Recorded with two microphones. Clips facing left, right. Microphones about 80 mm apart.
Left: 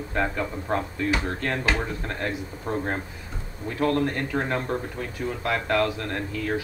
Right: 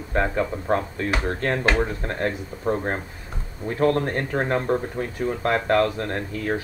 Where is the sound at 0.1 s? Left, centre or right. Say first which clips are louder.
Right 4 dB; right.